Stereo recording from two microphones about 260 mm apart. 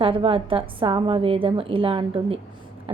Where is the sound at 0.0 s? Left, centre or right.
Centre.